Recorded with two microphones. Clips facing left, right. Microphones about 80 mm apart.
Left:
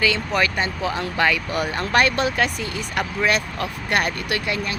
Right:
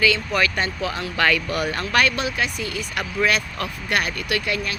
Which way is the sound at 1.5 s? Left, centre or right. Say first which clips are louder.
Left 1 dB; left.